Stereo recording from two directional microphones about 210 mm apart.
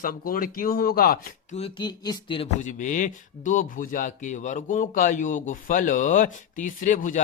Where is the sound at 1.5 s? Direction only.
25° left (ahead or behind).